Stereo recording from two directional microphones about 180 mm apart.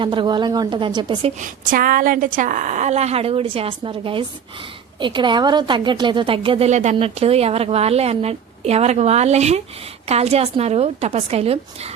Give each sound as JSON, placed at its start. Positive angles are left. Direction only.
{"t": 0.0, "sound": "a woman's voice", "side_deg": -25}
{"t": 1.4, "sound": "a woman's voice", "side_deg": -50}